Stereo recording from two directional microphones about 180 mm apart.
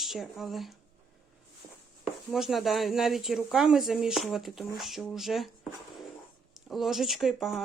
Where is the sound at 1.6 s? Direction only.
15° left (ahead or behind).